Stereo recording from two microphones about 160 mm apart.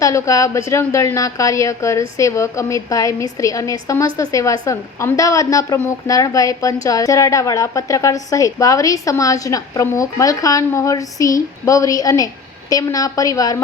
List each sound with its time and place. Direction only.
0.0 s a woman's voice: 20° left (ahead or behind)